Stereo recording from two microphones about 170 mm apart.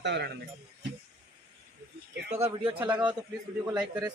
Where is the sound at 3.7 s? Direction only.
5° right (ahead or behind).